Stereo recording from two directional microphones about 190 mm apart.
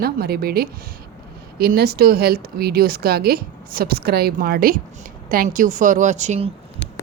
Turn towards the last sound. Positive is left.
turn(degrees=-35)  # may be behind; listen again after turning